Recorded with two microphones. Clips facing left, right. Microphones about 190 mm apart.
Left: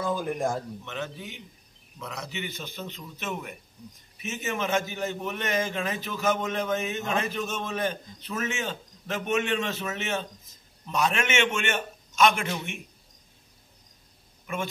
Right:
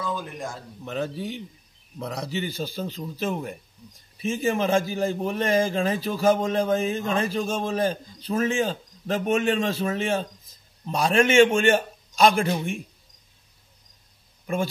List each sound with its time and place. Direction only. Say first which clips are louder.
0.0 s speech: left 4 dB; 50° left (ahead or behind)
0.8 s a man's voice: right 7 dB; 35° right (ahead or behind)
14.4 s a sound: right 6 dB; 35° right (ahead or behind)